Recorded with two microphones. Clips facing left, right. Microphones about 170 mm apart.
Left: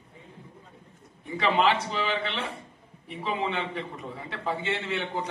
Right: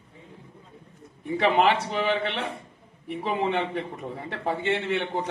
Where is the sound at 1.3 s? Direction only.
60° right (ahead or behind).